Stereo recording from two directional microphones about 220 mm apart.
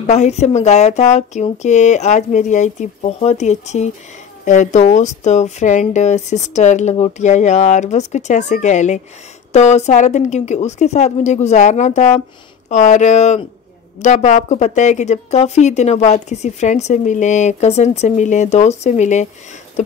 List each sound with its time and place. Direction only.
0.0 s speech: 30° left (ahead or behind)